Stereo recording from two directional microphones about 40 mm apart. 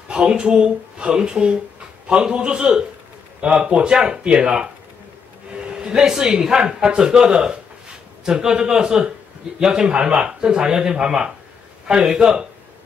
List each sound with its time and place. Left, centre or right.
0.1 s speech: right
5.7 s speech: right